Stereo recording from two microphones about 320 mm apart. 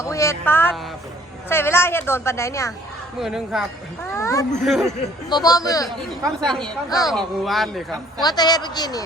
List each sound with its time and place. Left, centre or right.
0.0 s music: centre
1.5 s speech: centre
3.2 s speech: centre
4.1 s speech: centre
5.3 s speech: centre
8.2 s speech: centre